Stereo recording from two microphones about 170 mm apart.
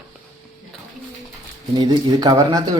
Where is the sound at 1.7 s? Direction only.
25° right (ahead or behind).